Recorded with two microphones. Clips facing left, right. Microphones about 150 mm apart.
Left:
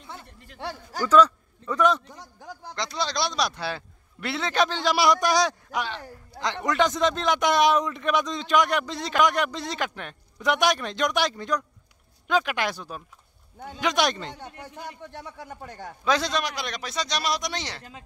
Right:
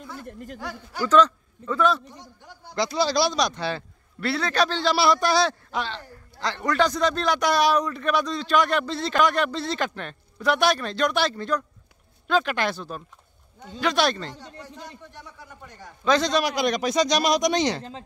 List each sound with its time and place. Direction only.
0.2 s speech: 50° right (ahead or behind)
0.6 s a man's voice: 30° left (ahead or behind)
1.0 s speech: 10° left (ahead or behind)
2.7 s speech: 5° right (ahead or behind); by 14.3 s 15° left (ahead or behind)
15.1 s speech: 65° left (ahead or behind)
16.0 s speech: 5° left (ahead or behind)
16.3 s speech: 10° right (ahead or behind)